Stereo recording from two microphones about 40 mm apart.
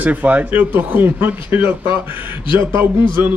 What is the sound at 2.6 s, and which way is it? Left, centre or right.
Speech, right.